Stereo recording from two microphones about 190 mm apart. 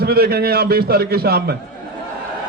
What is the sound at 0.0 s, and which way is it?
A man's voice, 55° right (ahead or behind).